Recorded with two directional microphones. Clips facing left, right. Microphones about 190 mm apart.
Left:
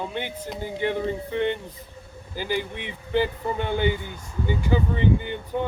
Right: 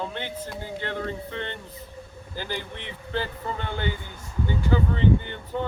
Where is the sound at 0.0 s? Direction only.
15° left (ahead or behind).